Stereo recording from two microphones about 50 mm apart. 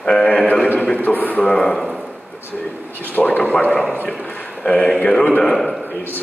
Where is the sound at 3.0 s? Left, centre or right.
Left.